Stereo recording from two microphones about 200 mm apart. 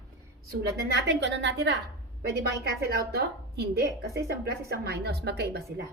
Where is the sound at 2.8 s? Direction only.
55° right (ahead or behind).